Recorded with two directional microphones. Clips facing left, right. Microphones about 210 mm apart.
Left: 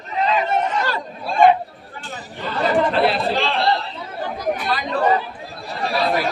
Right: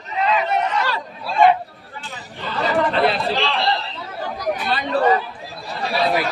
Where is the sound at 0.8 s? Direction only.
50° left (ahead or behind).